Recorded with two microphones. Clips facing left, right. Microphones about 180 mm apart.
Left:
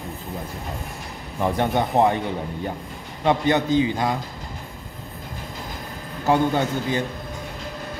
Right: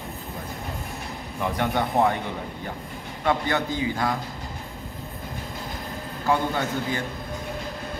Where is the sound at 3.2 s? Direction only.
20° left (ahead or behind).